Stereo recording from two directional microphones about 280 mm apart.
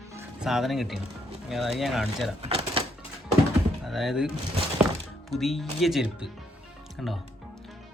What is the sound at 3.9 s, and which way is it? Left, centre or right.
Speech, centre.